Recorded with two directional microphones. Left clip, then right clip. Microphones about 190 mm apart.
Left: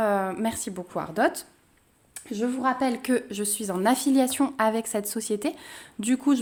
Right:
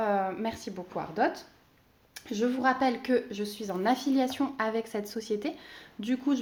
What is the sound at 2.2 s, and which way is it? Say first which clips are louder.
A woman's voice: left 1 dB; 25° left (ahead or behind).